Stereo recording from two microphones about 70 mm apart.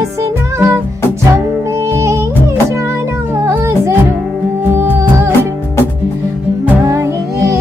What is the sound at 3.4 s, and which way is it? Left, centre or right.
Music, right.